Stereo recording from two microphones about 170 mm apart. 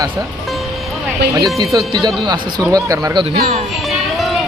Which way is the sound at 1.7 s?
25° right (ahead or behind).